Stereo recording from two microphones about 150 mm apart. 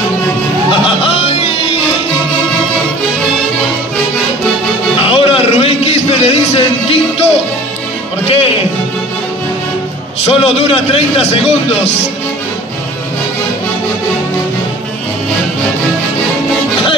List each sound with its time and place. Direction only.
0.7 s music: 35° left (ahead or behind)
5.0 s a sound: 40° left (ahead or behind)
8.3 s music: 40° left (ahead or behind)
10.2 s a man's voice: 40° left (ahead or behind)